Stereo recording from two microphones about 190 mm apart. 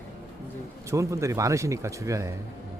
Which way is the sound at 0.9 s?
15° right (ahead or behind).